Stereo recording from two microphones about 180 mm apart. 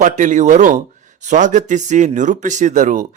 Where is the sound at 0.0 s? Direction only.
45° right (ahead or behind).